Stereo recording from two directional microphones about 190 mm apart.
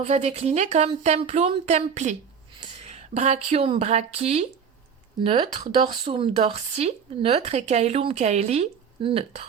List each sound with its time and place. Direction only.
0.0 s speech: 35° right (ahead or behind)